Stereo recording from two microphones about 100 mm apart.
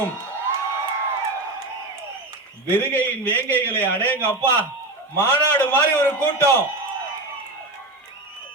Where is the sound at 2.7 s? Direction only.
20° left (ahead or behind).